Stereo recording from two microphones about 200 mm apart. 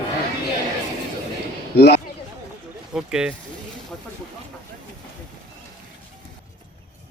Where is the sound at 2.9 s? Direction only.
5° right (ahead or behind).